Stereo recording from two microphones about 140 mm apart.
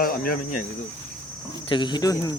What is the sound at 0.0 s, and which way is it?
Cricket, 90° left.